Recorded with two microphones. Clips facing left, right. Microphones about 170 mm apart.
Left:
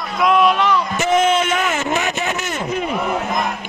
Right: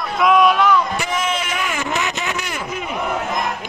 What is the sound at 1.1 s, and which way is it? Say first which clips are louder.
Speech: left 10 dB; 30° left (ahead or behind).